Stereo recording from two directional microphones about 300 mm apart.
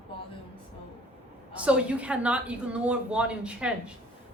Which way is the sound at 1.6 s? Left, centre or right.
Centre.